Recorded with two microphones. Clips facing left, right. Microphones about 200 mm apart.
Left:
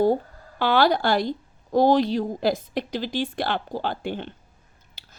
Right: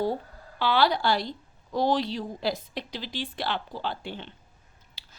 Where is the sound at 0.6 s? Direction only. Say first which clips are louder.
Left 4 dB; 50° left (ahead or behind).